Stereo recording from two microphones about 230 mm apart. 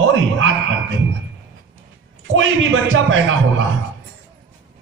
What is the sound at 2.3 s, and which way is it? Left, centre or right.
A man's voice, right.